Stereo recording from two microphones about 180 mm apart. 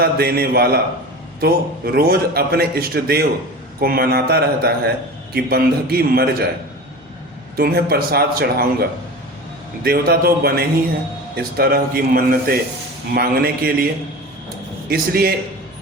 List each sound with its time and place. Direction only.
0.0 s a man's voice: 60° right (ahead or behind)
7.5 s a man's voice: 60° right (ahead or behind)
9.8 s a man's voice: 55° right (ahead or behind)
14.8 s a man's voice: 55° right (ahead or behind)